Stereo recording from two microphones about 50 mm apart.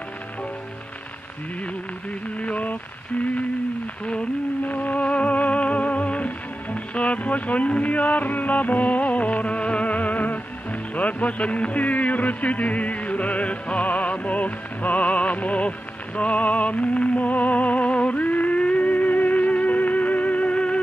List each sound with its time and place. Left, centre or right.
2.3 s a sound: left
4.0 s humming: left
4.6 s music: left